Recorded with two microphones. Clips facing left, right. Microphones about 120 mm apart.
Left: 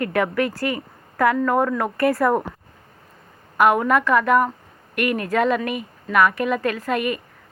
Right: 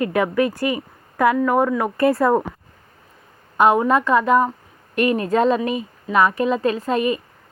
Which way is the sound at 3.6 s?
25° right (ahead or behind).